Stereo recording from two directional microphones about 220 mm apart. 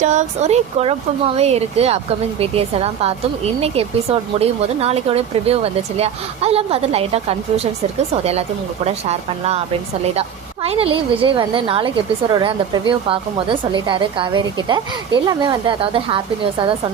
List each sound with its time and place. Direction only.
0.0 s a woman's voice: 30° right (ahead or behind)